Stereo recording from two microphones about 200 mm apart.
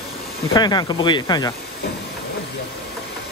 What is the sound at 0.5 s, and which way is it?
Speech, 20° left (ahead or behind).